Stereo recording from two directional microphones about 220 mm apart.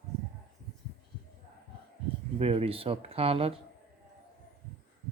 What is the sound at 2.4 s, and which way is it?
Speech, 25° right (ahead or behind).